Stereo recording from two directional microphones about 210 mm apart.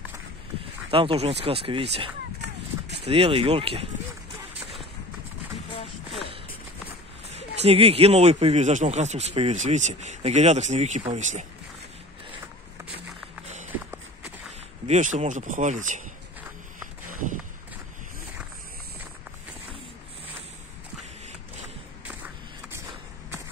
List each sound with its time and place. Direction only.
0.8 s speech: 25° right (ahead or behind)
7.3 s speech: 30° right (ahead or behind)
14.9 s speech: 35° right (ahead or behind)
22.0 s a sound: 5° right (ahead or behind)